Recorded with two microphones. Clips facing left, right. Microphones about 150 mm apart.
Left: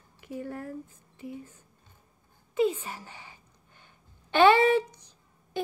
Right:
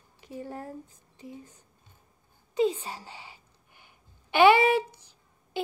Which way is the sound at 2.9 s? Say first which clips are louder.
Right 1 dB; 15° right (ahead or behind).